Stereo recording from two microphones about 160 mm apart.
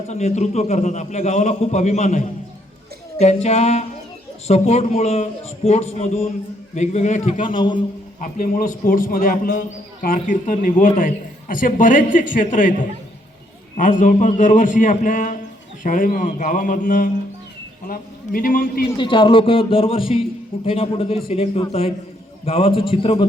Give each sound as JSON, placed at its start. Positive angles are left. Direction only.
{"t": 0.1, "sound": "a man's voice", "side_deg": 45}
{"t": 7.5, "sound": "a man's voice", "side_deg": 30}
{"t": 8.2, "sound": "a man's voice", "side_deg": 60}
{"t": 17.8, "sound": "a man's voice", "side_deg": 65}
{"t": 18.9, "sound": "a man's voice", "side_deg": 30}